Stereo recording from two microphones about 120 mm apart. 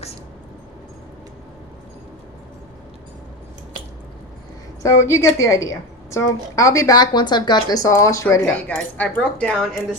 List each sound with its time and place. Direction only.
4.8 s a woman's voice: 25° left (ahead or behind)
8.6 s speech: 10° left (ahead or behind)